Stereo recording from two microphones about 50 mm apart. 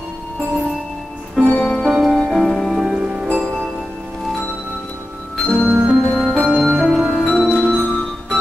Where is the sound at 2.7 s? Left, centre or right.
Centre.